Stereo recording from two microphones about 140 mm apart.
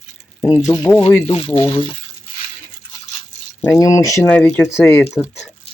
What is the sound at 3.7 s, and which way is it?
Speech, 25° left (ahead or behind).